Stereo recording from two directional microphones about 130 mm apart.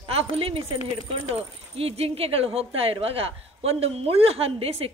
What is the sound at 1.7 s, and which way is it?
A man's voice, 50° right (ahead or behind).